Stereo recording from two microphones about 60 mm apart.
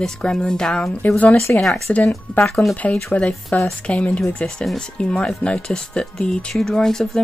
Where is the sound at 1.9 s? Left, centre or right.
Centre.